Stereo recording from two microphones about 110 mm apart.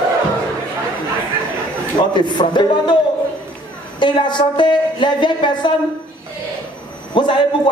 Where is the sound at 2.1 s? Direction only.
45° left (ahead or behind).